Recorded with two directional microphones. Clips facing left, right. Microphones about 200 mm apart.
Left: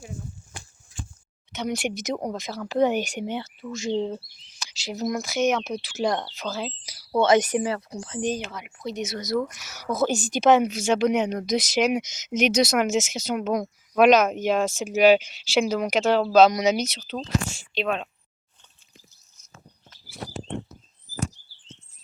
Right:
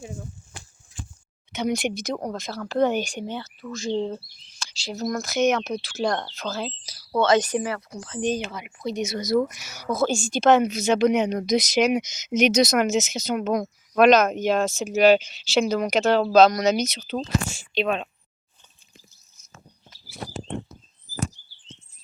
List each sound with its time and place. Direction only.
1.5 s speech: 5° left (ahead or behind)
2.2 s speech: 15° left (ahead or behind)
8.2 s speech: 5° left (ahead or behind)
9.9 s speech: 20° left (ahead or behind); by 18.1 s centre (ahead or behind)